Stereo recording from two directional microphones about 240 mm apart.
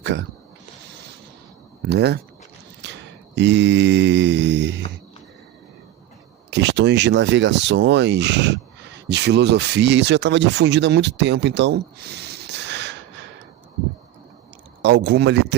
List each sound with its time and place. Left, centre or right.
0.0 s a sound: right
1.9 s speech: right
2.8 s mantra: right
6.5 s speech: right
14.8 s speech: right